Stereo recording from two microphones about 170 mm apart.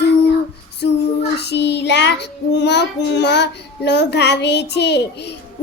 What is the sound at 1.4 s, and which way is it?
A woman's voice, 85° left.